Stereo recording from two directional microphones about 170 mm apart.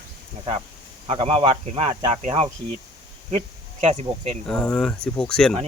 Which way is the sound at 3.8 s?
35° right (ahead or behind).